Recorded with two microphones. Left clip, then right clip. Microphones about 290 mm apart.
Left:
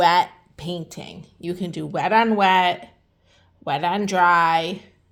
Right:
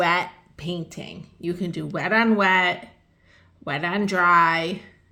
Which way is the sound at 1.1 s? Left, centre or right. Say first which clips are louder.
Even; left.